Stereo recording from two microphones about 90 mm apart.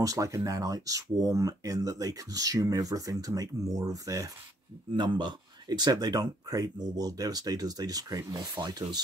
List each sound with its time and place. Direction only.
0.0 s speech: 40° right (ahead or behind)
4.9 s speech: 55° right (ahead or behind)